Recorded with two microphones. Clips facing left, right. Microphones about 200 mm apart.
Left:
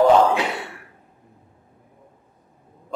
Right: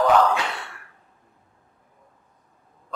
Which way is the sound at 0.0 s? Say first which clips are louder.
Left 4 dB; 20° left (ahead or behind).